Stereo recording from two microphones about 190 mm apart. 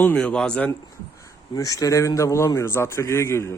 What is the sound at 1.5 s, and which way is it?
A man's voice, 20° left (ahead or behind).